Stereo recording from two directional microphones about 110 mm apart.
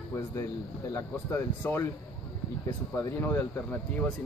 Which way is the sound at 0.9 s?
20° left (ahead or behind).